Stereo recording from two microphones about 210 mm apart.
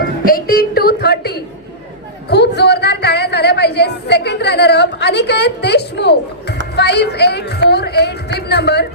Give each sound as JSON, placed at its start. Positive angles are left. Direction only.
{"t": 0.3, "sound": "speech", "side_deg": 45}